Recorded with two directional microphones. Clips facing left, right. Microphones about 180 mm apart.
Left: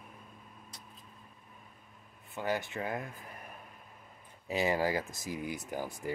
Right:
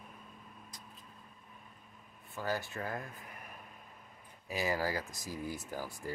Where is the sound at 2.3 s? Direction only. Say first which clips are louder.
Left 3 dB; 20° left (ahead or behind).